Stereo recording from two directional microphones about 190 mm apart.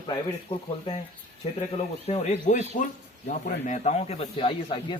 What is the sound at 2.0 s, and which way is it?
Speech, 35° left (ahead or behind).